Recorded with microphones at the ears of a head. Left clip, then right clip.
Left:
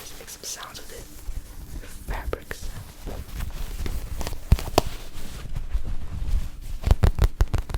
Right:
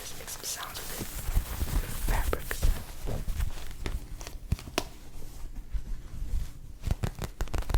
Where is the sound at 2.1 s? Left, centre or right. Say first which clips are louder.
Left 1 dB; centre.